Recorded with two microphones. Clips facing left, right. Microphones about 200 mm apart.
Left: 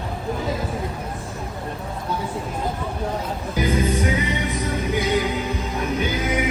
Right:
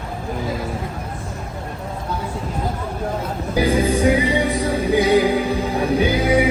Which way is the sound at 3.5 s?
30° right (ahead or behind).